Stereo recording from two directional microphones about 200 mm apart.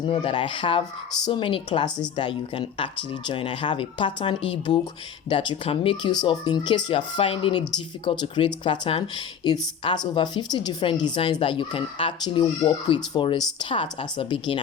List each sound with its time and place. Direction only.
0.0 s speech: 25° left (ahead or behind)